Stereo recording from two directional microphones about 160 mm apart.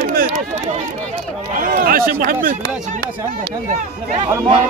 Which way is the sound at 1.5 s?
60° right (ahead or behind).